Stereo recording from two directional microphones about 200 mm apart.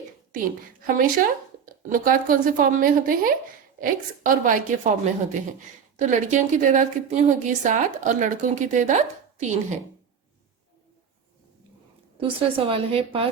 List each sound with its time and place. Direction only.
0.3 s a woman's voice: 45° right (ahead or behind)
6.0 s a woman's voice: 40° right (ahead or behind)
12.1 s a woman's voice: 25° right (ahead or behind)